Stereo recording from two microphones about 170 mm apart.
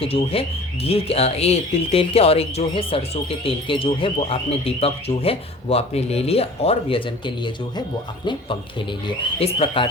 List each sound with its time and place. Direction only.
0.0 s speech: 35° left (ahead or behind)